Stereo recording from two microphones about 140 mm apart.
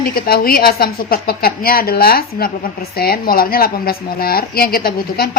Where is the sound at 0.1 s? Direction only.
90° left.